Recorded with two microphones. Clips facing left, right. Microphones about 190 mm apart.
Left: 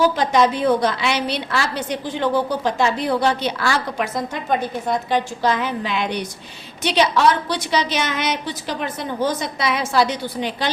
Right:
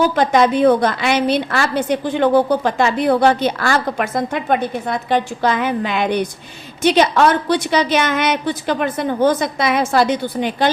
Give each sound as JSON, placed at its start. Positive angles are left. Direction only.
{"t": 0.2, "sound": "a woman's voice", "side_deg": -55}